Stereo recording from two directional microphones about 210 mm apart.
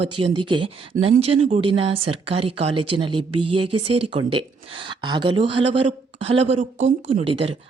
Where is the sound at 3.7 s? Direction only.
90° right.